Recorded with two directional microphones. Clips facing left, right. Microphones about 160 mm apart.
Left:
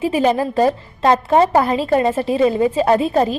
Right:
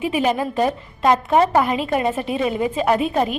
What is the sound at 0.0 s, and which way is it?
A woman's voice, 35° left (ahead or behind).